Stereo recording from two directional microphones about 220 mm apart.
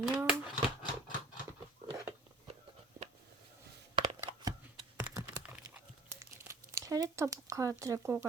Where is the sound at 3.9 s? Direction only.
20° right (ahead or behind).